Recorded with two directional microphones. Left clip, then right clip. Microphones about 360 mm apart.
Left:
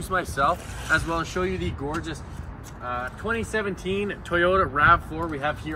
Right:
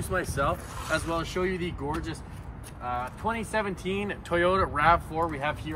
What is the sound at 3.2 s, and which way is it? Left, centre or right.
Speech, right.